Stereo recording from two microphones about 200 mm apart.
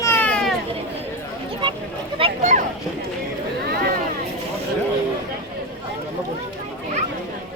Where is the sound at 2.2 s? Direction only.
35° right (ahead or behind).